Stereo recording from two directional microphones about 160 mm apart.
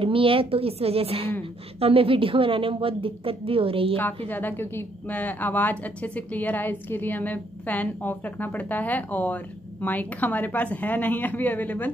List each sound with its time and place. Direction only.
0.0 s a woman's voice: 35° right (ahead or behind)
4.3 s a woman's voice: 10° left (ahead or behind)